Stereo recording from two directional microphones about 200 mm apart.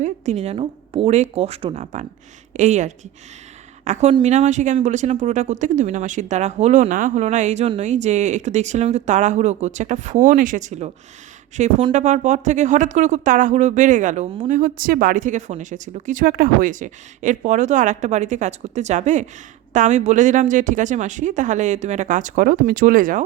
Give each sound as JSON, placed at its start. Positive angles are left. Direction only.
{"t": 0.0, "sound": "speech", "side_deg": -35}